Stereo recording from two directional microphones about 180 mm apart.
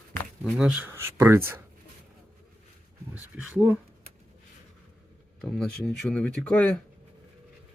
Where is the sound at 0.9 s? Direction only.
15° right (ahead or behind).